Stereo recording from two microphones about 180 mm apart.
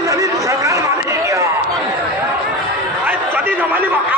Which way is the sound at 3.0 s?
10° right (ahead or behind).